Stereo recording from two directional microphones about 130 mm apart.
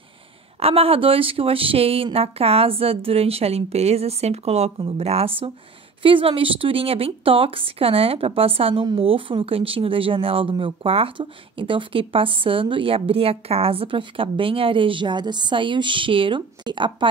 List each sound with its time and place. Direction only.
0.6 s speech: 50° right (ahead or behind)